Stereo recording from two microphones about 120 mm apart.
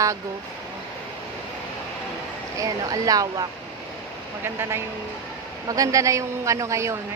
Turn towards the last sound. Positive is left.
turn(degrees=-25)  # may be behind; listen again after turning